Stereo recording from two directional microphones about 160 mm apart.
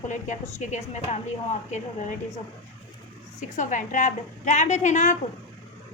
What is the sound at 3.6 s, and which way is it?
A woman's voice, 50° left (ahead or behind).